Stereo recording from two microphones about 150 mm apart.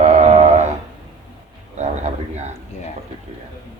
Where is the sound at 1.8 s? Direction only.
50° right (ahead or behind).